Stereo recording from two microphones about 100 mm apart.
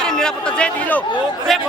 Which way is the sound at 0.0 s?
5° left (ahead or behind).